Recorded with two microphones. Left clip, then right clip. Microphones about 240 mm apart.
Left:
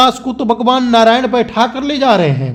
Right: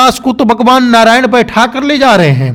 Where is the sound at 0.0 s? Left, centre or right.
Right.